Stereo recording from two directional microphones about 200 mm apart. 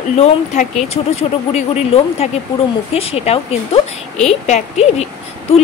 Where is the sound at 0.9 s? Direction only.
30° left (ahead or behind).